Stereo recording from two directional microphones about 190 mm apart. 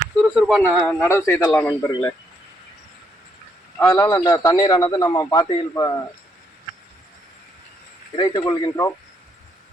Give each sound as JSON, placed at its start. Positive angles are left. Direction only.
{"t": 0.2, "sound": "speech", "side_deg": 0}
{"t": 1.0, "sound": "speech", "side_deg": 15}
{"t": 3.8, "sound": "a man's voice", "side_deg": 15}
{"t": 8.1, "sound": "speech", "side_deg": 20}